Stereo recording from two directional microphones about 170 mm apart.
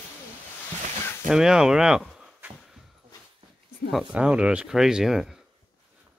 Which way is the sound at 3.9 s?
5° right (ahead or behind).